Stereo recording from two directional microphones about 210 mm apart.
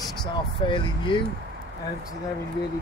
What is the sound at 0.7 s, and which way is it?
Speech, 25° left (ahead or behind).